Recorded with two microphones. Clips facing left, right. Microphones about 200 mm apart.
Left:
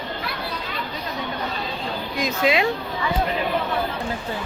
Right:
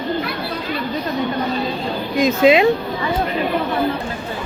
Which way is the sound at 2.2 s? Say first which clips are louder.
Right 8 dB; 20° right (ahead or behind).